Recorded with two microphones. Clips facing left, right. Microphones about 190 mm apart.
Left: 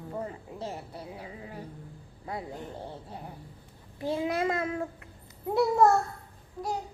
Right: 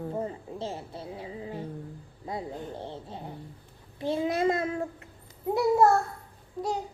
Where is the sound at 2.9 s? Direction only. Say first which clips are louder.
Right 3 dB; 25° right (ahead or behind).